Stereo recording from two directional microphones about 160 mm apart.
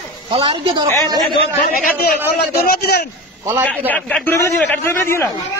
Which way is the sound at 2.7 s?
90° left.